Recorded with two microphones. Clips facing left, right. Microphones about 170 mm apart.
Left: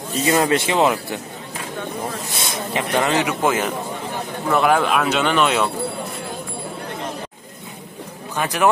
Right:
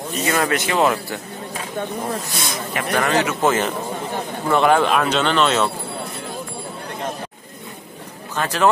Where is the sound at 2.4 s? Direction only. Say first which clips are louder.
Left 1 dB; 25° left (ahead or behind).